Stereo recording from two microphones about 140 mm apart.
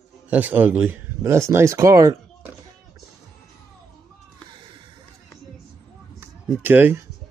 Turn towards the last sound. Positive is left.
turn(degrees=-15)  # may be behind; listen again after turning